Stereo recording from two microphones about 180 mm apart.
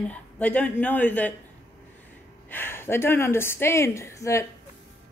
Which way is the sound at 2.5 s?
10° left (ahead or behind).